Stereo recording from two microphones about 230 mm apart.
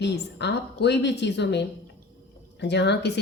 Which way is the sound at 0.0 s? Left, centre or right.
Left.